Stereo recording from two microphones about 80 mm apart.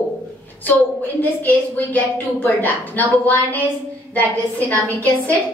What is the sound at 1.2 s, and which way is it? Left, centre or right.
A woman's voice, left.